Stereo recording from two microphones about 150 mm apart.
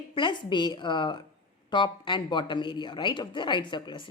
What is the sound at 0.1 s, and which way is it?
A woman's voice, 30° left (ahead or behind).